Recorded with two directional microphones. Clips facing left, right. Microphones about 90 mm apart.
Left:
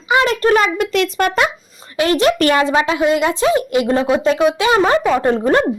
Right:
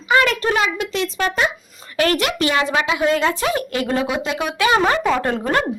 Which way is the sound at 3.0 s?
15° left (ahead or behind).